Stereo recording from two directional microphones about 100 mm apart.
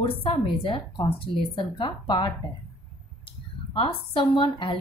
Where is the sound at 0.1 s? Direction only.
70° left (ahead or behind); by 2.2 s 50° left (ahead or behind).